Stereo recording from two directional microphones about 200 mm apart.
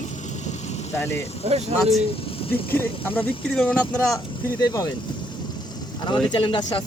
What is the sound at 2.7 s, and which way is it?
Speech, 10° left (ahead or behind).